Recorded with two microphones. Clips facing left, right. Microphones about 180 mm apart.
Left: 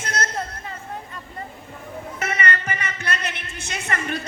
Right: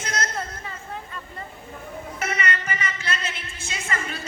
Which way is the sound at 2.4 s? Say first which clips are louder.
Left 2 dB; 55° left (ahead or behind).